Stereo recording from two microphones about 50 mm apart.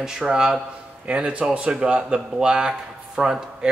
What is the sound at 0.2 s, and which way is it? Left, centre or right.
Speech, centre.